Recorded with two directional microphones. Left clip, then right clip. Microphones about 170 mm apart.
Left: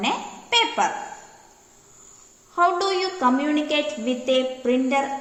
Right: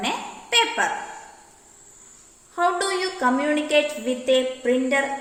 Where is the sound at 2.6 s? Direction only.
60° left (ahead or behind).